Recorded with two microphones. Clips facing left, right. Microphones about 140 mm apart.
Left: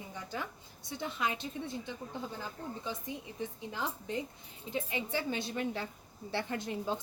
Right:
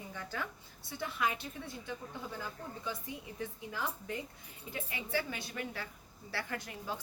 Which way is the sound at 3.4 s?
20° left (ahead or behind).